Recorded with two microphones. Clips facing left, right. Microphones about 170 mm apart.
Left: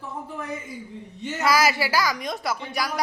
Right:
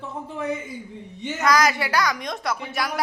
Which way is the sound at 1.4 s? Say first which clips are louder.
Right 1 dB; 5° left (ahead or behind).